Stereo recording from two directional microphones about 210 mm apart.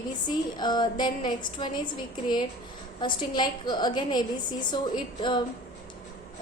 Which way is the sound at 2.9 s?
20° left (ahead or behind).